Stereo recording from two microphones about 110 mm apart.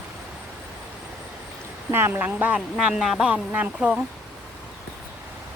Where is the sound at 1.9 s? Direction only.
20° right (ahead or behind).